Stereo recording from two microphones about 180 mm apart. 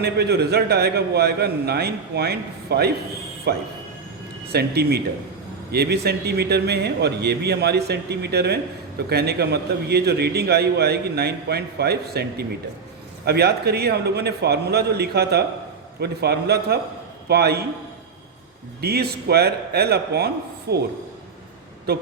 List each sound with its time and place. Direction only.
0.0 s a man's voice: 65° right (ahead or behind)
18.8 s a man's voice: 60° right (ahead or behind)